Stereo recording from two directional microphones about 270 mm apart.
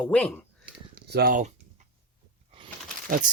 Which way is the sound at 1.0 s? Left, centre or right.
Right.